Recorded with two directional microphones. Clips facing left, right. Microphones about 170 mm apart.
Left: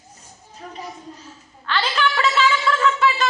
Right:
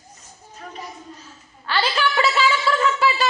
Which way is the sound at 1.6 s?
10° right (ahead or behind).